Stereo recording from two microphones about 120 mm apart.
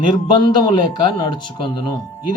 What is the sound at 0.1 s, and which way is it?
Speech, 40° left (ahead or behind).